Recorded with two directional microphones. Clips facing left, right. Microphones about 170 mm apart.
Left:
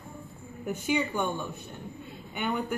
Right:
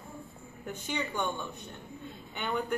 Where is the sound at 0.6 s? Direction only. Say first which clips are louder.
Left 7 dB; 10° left (ahead or behind).